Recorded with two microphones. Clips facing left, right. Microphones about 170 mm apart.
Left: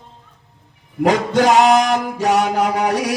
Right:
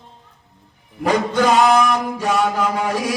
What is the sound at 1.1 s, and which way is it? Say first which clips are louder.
Chant: left 2 dB; 85° left.